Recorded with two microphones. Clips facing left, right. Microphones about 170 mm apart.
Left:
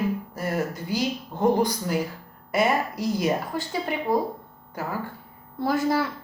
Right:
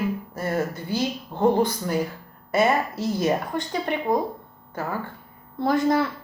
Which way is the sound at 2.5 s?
25° right (ahead or behind).